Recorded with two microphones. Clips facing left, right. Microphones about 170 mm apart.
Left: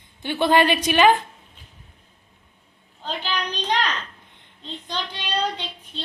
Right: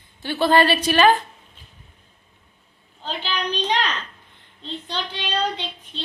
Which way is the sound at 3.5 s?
10° left (ahead or behind).